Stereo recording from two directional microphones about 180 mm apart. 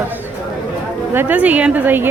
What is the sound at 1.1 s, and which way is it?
Speech, 10° right (ahead or behind).